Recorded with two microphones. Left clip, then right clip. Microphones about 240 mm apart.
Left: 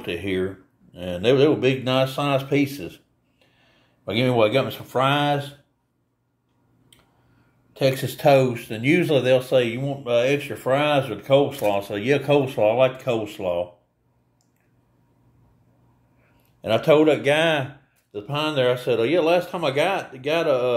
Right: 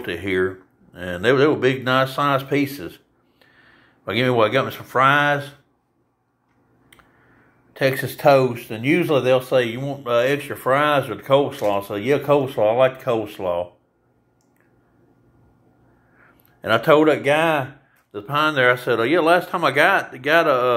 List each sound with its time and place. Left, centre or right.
0.0 s speech: centre
7.7 s speech: centre
10.4 s speech: right
10.7 s speech: centre
16.6 s speech: centre